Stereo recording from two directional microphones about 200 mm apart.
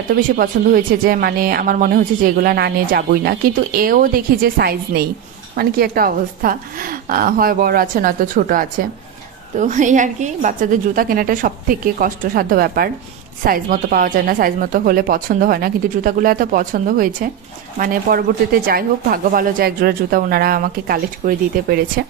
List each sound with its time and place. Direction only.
0.4 s speech: 45° right (ahead or behind)